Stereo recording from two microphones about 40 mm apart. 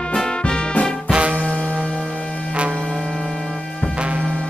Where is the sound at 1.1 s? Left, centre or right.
Right.